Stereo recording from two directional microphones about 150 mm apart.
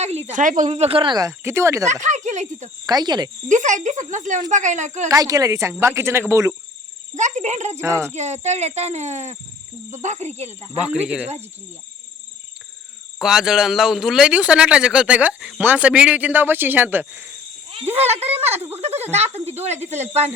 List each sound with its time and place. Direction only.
0.0 s speech: 45° right (ahead or behind); by 1.9 s 20° right (ahead or behind)
1.9 s speech: 55° right (ahead or behind)
2.8 s speech: 25° right (ahead or behind)
3.5 s speech: 55° right (ahead or behind)
5.0 s speech: 25° right (ahead or behind)
7.1 s speech: 55° right (ahead or behind)
7.8 s speech: 20° right (ahead or behind)
8.1 s speech: 50° right (ahead or behind)
10.8 s speech: 10° right (ahead or behind)
13.1 s speech: 5° right (ahead or behind)
17.9 s speech: 45° right (ahead or behind)
18.5 s speech: 15° right (ahead or behind)
18.8 s speech: 45° right (ahead or behind)